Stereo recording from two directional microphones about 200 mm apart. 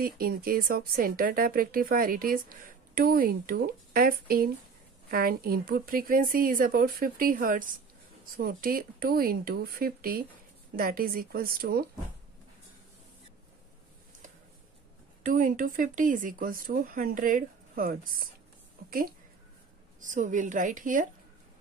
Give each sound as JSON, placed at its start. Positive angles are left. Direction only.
{"t": 0.0, "sound": "speech", "side_deg": -50}
{"t": 15.2, "sound": "a woman's voice", "side_deg": -40}